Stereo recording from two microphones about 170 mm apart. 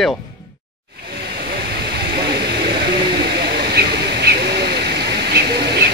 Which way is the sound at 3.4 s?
70° right (ahead or behind).